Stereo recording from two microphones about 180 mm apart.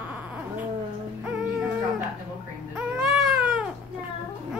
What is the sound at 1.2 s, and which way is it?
Music, 5° right (ahead or behind).